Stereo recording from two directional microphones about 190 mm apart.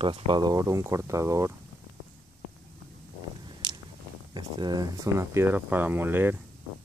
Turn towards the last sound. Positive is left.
turn(degrees=-10)  # may be behind; listen again after turning